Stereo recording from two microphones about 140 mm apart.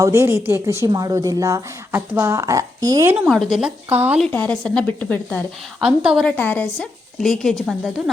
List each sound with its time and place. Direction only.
0.0 s speech: 20° right (ahead or behind)
3.2 s speech: centre (ahead or behind)
3.9 s a woman's voice: 15° right (ahead or behind)
4.3 s speech: 10° left (ahead or behind)
5.8 s speech: 5° right (ahead or behind)
6.2 s speech: 10° left (ahead or behind)